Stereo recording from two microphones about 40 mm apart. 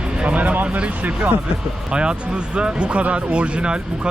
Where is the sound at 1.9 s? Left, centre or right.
Right.